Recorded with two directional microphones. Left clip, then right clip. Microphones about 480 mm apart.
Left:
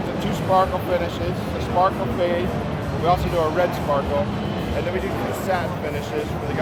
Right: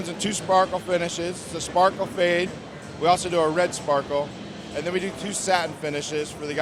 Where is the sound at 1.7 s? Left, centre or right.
Right.